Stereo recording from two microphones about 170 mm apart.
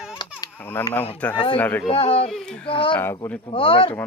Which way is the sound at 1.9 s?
35° left (ahead or behind).